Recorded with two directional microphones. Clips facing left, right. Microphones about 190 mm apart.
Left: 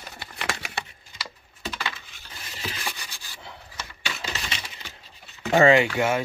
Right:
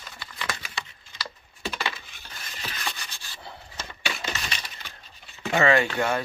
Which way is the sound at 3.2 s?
15° left (ahead or behind).